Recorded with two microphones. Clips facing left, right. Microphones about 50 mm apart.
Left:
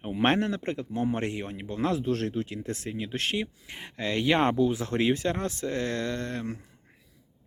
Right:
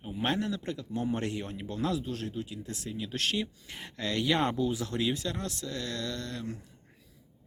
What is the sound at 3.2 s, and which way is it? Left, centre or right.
Speech, left.